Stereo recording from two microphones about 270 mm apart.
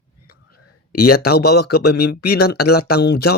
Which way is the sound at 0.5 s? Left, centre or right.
Left.